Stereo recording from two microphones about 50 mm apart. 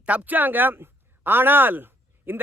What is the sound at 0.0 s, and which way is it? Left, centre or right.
A man's voice, right.